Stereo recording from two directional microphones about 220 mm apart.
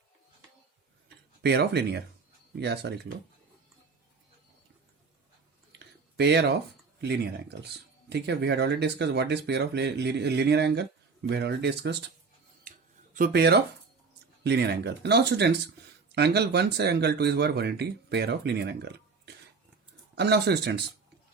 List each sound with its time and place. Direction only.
1.4 s speech: 50° right (ahead or behind)
6.1 s speech: 50° right (ahead or behind)
12.7 s a sound: 35° right (ahead or behind)
13.1 s speech: 45° right (ahead or behind)